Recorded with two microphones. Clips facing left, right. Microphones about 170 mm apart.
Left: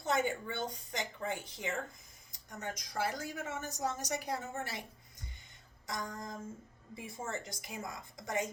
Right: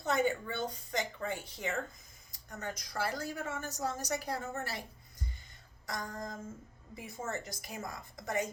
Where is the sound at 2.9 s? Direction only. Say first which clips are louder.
Right 1 dB; 20° left (ahead or behind).